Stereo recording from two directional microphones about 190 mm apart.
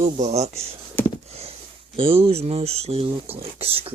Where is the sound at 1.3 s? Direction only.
35° right (ahead or behind).